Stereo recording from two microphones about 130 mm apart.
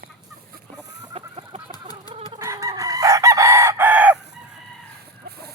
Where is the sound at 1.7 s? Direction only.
30° left (ahead or behind).